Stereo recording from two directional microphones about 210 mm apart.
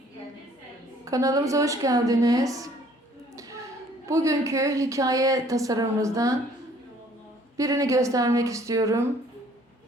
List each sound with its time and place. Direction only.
1.0 s a woman's voice: 15° right (ahead or behind)
7.5 s a woman's voice: 15° right (ahead or behind)